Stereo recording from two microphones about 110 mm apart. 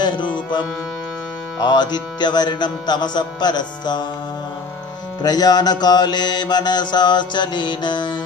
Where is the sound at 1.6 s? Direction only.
40° left (ahead or behind).